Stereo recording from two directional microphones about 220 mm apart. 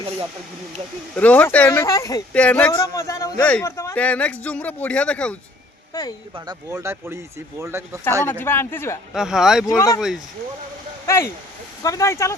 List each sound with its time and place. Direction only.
1.1 s speech: 5° left (ahead or behind)
5.9 s speech: 15° left (ahead or behind)
6.3 s speech: 15° right (ahead or behind)
8.3 s speech: 10° left (ahead or behind)
9.1 s speech: centre (ahead or behind)
9.6 s speech: 15° left (ahead or behind)
11.0 s speech: 10° left (ahead or behind)